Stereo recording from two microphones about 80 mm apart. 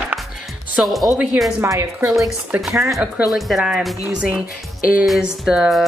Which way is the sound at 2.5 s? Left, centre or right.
Centre.